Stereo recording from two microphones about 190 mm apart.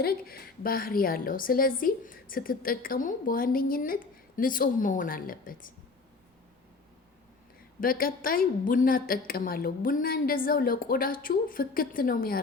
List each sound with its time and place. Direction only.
0.0 s a woman's voice: 55° left (ahead or behind)
7.8 s a woman's voice: 50° left (ahead or behind)